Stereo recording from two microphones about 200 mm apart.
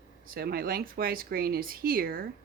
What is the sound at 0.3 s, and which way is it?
Speech, 50° right (ahead or behind).